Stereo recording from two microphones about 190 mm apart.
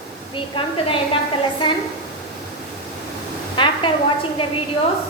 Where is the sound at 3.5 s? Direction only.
25° left (ahead or behind).